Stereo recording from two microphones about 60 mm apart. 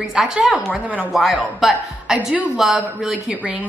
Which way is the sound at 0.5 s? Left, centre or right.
Right.